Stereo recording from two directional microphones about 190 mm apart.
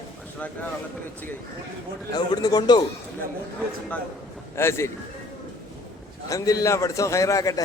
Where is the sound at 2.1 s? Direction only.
20° left (ahead or behind).